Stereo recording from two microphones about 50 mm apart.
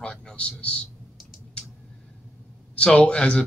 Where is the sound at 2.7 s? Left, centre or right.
Centre.